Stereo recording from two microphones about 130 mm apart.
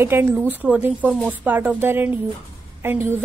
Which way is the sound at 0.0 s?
15° right (ahead or behind).